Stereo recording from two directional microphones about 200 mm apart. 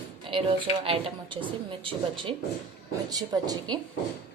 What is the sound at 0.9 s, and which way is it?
A woman's voice, 25° right (ahead or behind).